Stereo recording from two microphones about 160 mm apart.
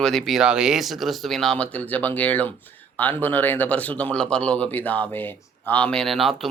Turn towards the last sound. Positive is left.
turn(degrees=0)  # may be behind; listen again after turning